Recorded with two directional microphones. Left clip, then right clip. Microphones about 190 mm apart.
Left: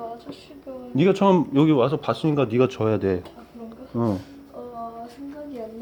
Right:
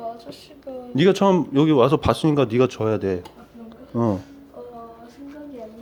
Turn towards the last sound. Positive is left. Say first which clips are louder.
# right 2 dB
turn(degrees=-10)  # may be behind; listen again after turning